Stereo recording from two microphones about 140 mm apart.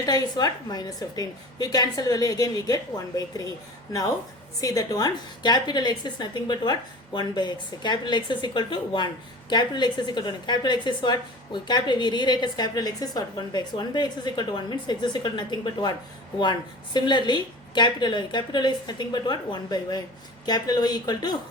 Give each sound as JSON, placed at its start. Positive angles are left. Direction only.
{"t": 0.0, "sound": "a woman's voice", "side_deg": 30}
{"t": 4.6, "sound": "a woman's voice", "side_deg": 25}